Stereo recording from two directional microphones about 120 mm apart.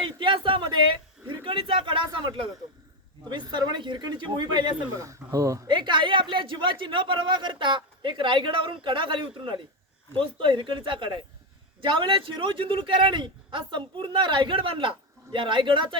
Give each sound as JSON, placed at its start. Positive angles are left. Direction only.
{"t": 0.0, "sound": "a sound", "side_deg": -45}
{"t": 1.5, "sound": "a man's voice", "side_deg": -50}
{"t": 4.9, "sound": "speech", "side_deg": -25}
{"t": 5.6, "sound": "a man's voice", "side_deg": -40}